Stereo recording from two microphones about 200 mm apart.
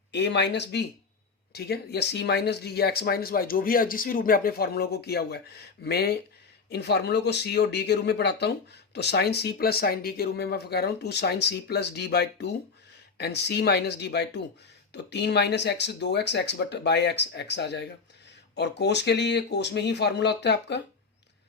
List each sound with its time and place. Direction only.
0.1 s speech: 60° left (ahead or behind)